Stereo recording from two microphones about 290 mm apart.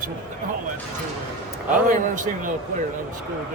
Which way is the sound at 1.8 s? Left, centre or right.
Right.